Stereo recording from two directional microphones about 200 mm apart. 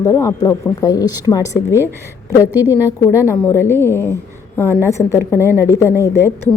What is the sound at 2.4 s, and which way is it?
Speech, 10° right (ahead or behind).